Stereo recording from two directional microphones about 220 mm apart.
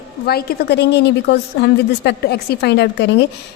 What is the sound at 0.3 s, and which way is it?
A woman's voice, 45° left (ahead or behind).